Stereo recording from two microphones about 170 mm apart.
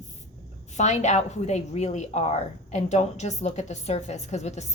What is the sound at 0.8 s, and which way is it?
A woman's voice, 45° left (ahead or behind).